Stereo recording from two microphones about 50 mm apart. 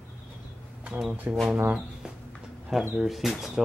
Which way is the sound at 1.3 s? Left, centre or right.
Right.